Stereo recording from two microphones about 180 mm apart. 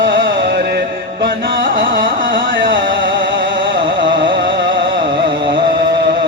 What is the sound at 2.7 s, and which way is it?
Music, 90° right.